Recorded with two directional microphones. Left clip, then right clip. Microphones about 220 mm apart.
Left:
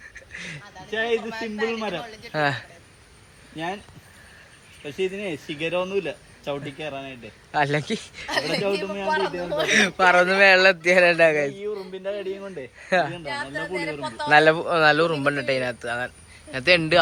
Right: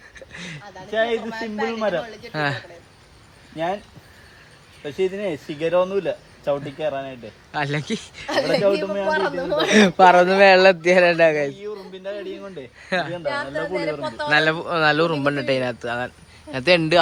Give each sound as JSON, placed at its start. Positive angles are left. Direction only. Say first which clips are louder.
{"t": 0.3, "sound": "a sound", "louder": "even", "side_deg": -10}
{"t": 1.1, "sound": "a man's voice", "louder": "right 1 dB", "side_deg": -45}
{"t": 2.3, "sound": "a woman's voice", "louder": "left 1 dB", "side_deg": -5}
{"t": 4.8, "sound": "speech", "louder": "right 4 dB", "side_deg": -15}
{"t": 8.3, "sound": "a man's voice", "louder": "right 5 dB", "side_deg": -40}
{"t": 8.8, "sound": "speech", "louder": "right 5 dB", "side_deg": -15}
{"t": 9.0, "sound": "a man's voice", "louder": "right 1 dB", "side_deg": -45}
{"t": 9.6, "sound": "speech", "louder": "right 5 dB", "side_deg": -20}
{"t": 12.0, "sound": "a man's voice", "louder": "even", "side_deg": 30}
{"t": 12.8, "sound": "a woman's voice", "louder": "left 2 dB", "side_deg": 0}
{"t": 13.2, "sound": "a man's voice", "louder": "right 5 dB", "side_deg": -40}
{"t": 13.6, "sound": "speech", "louder": "right 4 dB", "side_deg": -15}
{"t": 14.3, "sound": "speech", "louder": "left 3 dB", "side_deg": 0}